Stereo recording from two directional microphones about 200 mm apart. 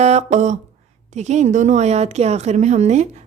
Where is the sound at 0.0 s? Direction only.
35° right (ahead or behind).